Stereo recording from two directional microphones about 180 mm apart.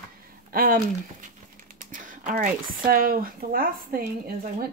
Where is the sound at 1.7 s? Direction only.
45° right (ahead or behind).